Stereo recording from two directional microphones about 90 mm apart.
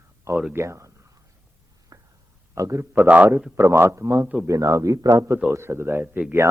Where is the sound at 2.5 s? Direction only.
35° right (ahead or behind).